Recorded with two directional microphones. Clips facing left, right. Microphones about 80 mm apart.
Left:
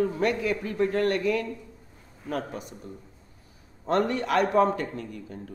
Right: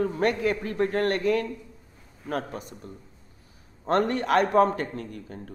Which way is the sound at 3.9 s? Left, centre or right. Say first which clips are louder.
Right 2 dB; right.